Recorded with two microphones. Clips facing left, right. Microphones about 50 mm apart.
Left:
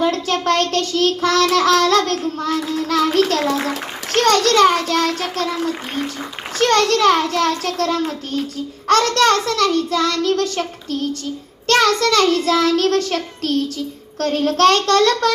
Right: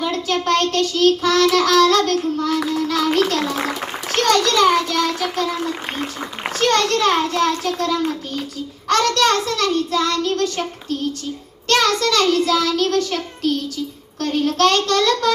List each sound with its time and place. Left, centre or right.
0.0 s child singing: left
2.8 s a child's voice: left
3.2 s child singing: left
6.6 s child singing: left
8.9 s child singing: left